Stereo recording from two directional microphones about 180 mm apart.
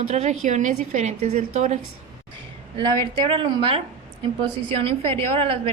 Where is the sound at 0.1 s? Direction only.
40° right (ahead or behind).